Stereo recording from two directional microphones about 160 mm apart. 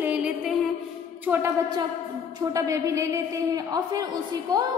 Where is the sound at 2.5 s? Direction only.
20° right (ahead or behind).